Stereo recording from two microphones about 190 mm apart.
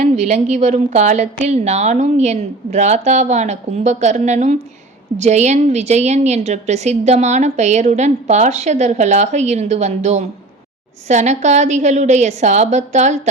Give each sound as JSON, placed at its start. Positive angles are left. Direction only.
{"t": 0.0, "sound": "a woman's voice", "side_deg": -35}